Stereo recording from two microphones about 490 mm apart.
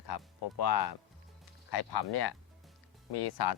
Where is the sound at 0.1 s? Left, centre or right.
Left.